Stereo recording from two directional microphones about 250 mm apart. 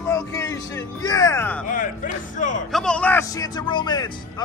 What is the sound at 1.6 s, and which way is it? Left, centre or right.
Speech, left.